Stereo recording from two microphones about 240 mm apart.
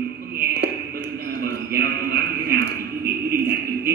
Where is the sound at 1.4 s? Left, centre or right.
Right.